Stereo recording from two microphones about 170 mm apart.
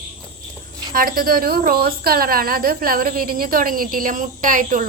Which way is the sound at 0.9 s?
60° right (ahead or behind).